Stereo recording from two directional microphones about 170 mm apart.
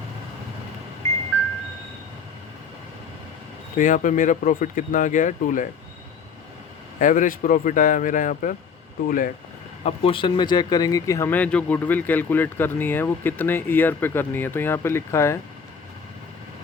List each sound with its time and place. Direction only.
3.8 s speech: 50° left (ahead or behind)
7.0 s speech: 50° left (ahead or behind)
9.8 s speech: 35° left (ahead or behind); by 15.4 s 15° left (ahead or behind)